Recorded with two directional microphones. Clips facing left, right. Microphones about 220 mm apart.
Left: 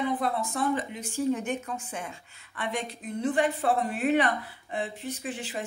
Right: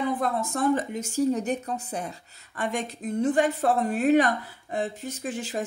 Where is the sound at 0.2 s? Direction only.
45° right (ahead or behind).